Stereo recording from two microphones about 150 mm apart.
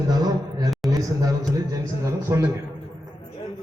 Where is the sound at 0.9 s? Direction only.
25° right (ahead or behind).